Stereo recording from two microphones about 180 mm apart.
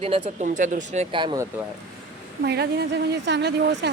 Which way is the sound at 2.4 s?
65° right (ahead or behind).